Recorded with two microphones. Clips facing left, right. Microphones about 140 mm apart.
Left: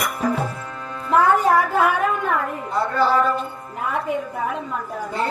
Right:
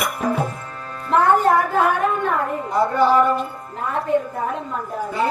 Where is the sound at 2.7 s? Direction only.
20° right (ahead or behind).